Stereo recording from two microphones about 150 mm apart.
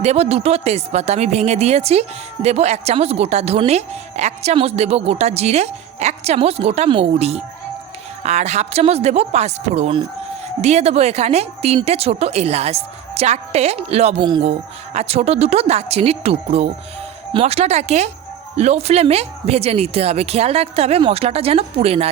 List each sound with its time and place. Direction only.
0.0 s speech: 45° right (ahead or behind)
14.3 s speech: 30° right (ahead or behind)
14.9 s speech: 45° right (ahead or behind)